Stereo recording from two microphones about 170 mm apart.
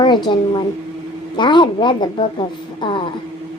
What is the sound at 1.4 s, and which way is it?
A woman's voice, 25° left (ahead or behind).